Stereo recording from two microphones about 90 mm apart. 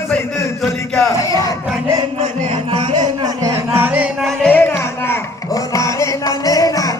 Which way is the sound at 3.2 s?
35° right (ahead or behind).